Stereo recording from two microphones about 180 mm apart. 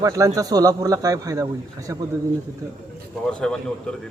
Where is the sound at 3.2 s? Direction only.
5° left (ahead or behind).